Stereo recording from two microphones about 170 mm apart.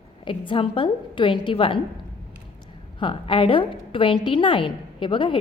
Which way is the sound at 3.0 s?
30° left (ahead or behind).